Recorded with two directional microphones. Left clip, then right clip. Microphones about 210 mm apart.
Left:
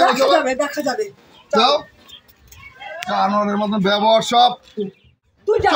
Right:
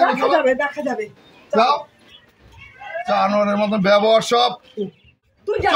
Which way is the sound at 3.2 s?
15° right (ahead or behind).